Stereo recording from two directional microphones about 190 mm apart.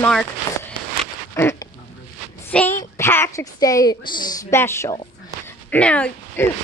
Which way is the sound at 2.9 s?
15° left (ahead or behind).